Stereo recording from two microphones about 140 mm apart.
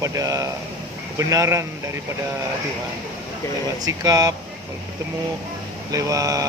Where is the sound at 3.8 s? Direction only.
25° right (ahead or behind).